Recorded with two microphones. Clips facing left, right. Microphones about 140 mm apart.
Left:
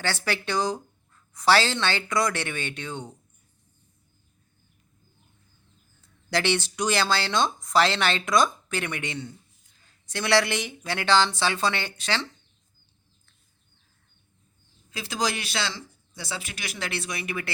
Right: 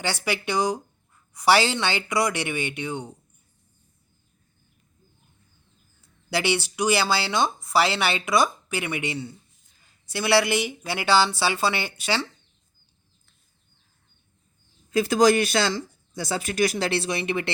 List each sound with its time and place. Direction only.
0.0 s speech: 15° right (ahead or behind)
6.0 s speech: 10° right (ahead or behind)
14.9 s speech: 50° right (ahead or behind); by 17.5 s 25° right (ahead or behind)